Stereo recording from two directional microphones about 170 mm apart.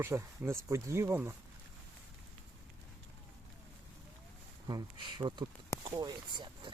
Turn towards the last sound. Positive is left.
turn(degrees=-25)  # may be behind; listen again after turning